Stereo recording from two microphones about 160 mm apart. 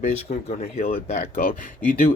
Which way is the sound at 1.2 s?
65° left (ahead or behind).